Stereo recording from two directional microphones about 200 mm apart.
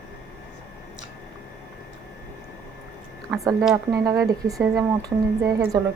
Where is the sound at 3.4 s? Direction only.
15° right (ahead or behind).